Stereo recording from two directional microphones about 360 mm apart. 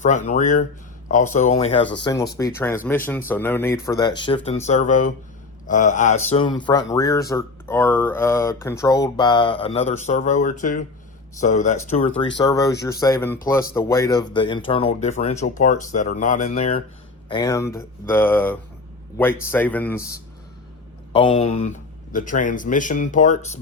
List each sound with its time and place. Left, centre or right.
0.0 s a man's voice: centre